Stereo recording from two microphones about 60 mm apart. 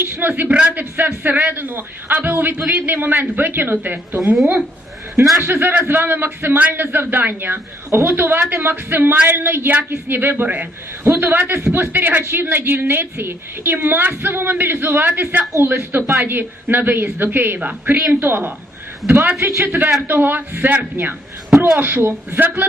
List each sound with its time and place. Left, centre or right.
0.0 s a man's voice: right
0.4 s a man's voice: right
5.4 s a man's voice: right
18.2 s a man's voice: right